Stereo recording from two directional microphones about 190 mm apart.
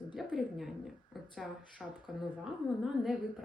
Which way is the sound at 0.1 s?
Centre (ahead or behind).